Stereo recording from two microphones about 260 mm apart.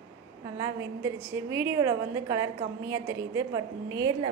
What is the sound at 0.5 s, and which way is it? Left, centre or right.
A woman's voice, centre.